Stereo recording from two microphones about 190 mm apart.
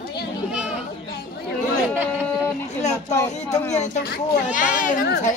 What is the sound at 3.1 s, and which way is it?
Speech, 15° left (ahead or behind).